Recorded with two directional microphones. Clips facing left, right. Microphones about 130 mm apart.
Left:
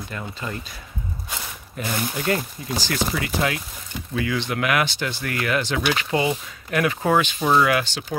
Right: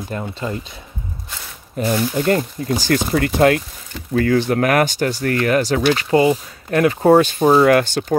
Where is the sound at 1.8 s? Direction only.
40° right (ahead or behind).